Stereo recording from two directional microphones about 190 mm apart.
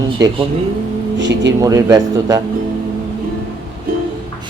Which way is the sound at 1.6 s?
20° right (ahead or behind).